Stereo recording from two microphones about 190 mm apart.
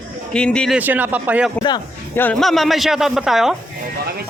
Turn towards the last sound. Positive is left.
turn(degrees=0)  # may be behind; listen again after turning